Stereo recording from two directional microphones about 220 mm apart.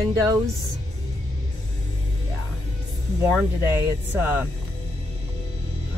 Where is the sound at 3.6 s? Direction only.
10° right (ahead or behind).